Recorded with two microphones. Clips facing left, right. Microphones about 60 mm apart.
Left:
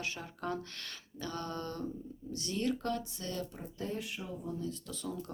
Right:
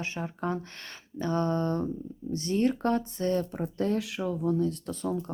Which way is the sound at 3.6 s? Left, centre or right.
Right.